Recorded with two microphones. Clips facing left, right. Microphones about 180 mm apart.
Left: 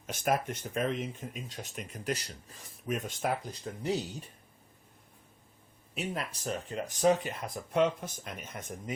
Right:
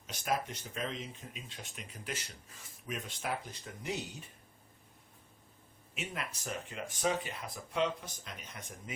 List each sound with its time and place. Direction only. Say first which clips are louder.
0.1 s speech: left 5 dB; 50° left (ahead or behind); by 4.0 s 35° left (ahead or behind)
5.9 s speech: left 5 dB; 35° left (ahead or behind)